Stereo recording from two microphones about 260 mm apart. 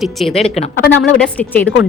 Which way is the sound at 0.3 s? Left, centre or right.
Left.